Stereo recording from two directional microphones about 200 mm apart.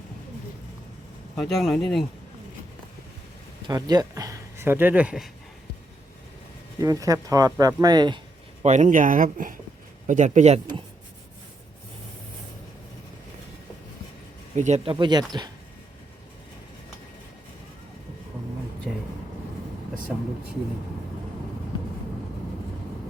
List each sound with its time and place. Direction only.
1.4 s speech: centre (ahead or behind)
3.7 s speech: 20° right (ahead or behind); by 5.3 s 5° right (ahead or behind)
6.7 s speech: 15° right (ahead or behind)
8.6 s speech: 35° right (ahead or behind)
14.5 s speech: 35° right (ahead or behind)